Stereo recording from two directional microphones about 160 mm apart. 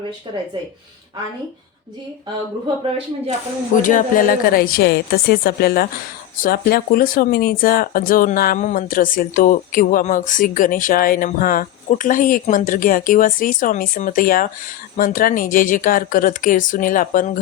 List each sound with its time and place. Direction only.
3.8 s speech: 55° left (ahead or behind)
8.5 s speech: 50° left (ahead or behind)